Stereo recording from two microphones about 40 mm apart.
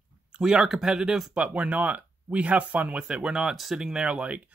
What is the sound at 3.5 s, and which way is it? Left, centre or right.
Speech, centre.